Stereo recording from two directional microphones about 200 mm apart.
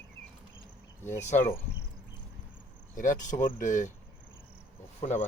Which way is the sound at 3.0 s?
40° left (ahead or behind).